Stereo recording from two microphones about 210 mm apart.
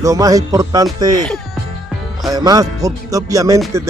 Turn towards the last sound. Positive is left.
turn(degrees=-15)  # may be behind; listen again after turning